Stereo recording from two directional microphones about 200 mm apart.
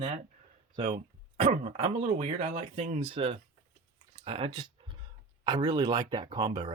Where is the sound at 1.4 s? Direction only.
30° right (ahead or behind).